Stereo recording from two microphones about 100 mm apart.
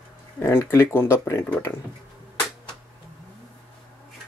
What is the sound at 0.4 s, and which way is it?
Speech, 25° left (ahead or behind).